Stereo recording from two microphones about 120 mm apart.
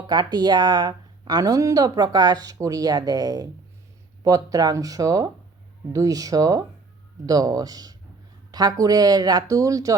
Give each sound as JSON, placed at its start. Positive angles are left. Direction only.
{"t": 0.1, "sound": "speech", "side_deg": -35}